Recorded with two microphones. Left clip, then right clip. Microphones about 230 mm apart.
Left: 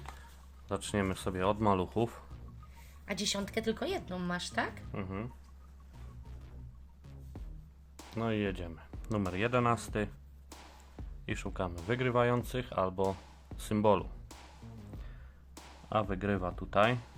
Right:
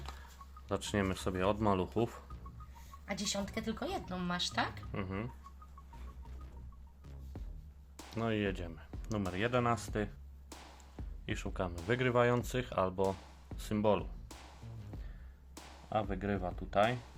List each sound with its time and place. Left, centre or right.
0.0 s a sound: centre
0.7 s speech: centre
3.1 s speech: left
4.9 s speech: centre
7.3 s music: centre
7.9 s speech: centre
14.3 s music: centre
15.5 s a sound: centre
15.9 s speech: centre